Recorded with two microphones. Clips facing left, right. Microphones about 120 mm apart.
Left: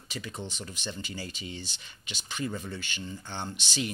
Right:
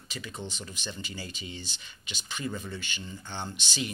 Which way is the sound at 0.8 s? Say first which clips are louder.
Left 2 dB; 40° left (ahead or behind).